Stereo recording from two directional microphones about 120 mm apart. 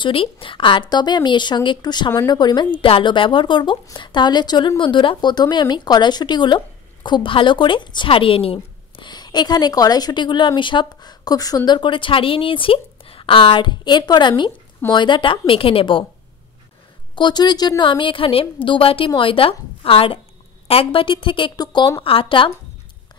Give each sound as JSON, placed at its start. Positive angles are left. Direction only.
{"t": 0.0, "sound": "a woman's voice", "side_deg": 50}
{"t": 17.1, "sound": "a woman's voice", "side_deg": 40}
{"t": 22.0, "sound": "a woman's voice", "side_deg": 50}